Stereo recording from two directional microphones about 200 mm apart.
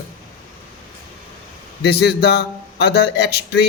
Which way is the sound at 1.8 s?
55° left (ahead or behind).